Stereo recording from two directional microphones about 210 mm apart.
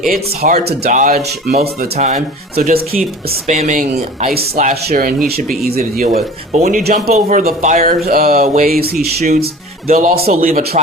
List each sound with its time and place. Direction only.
0.6 s speech: 50° right (ahead or behind)
2.0 s speech: 35° right (ahead or behind)